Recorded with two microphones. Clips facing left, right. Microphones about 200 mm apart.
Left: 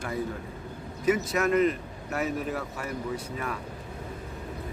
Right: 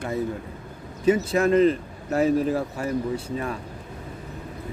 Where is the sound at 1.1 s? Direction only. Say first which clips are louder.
Right 5 dB; 30° right (ahead or behind).